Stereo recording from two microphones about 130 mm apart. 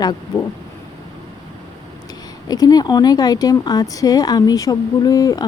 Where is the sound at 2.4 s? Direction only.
30° left (ahead or behind).